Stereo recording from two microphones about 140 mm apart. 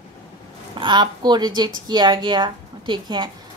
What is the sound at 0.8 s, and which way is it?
Speech, 30° right (ahead or behind).